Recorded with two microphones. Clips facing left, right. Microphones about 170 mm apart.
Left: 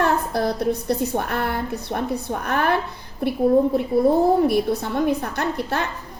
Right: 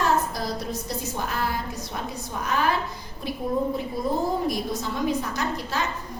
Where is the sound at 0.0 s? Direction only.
60° left (ahead or behind).